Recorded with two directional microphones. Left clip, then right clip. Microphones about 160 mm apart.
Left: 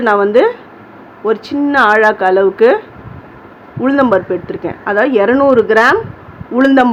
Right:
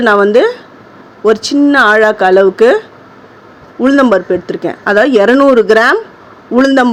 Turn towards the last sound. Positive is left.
turn(degrees=-35)  # may be behind; listen again after turning